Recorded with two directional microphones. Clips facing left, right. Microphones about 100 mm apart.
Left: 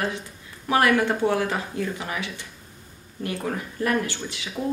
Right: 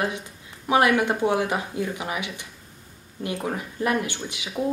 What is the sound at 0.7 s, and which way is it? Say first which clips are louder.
A woman's voice: even; 20° right (ahead or behind).